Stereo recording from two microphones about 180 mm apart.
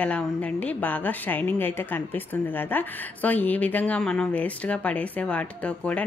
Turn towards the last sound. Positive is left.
turn(degrees=5)  # may be behind; listen again after turning